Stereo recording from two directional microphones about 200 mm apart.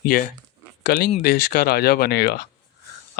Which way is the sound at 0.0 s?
45° left (ahead or behind).